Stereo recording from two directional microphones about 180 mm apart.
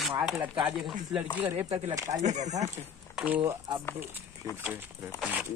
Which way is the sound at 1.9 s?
20° right (ahead or behind).